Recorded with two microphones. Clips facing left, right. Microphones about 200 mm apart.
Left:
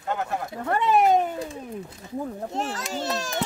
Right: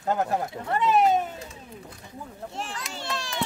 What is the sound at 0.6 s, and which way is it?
Speech, 50° left (ahead or behind).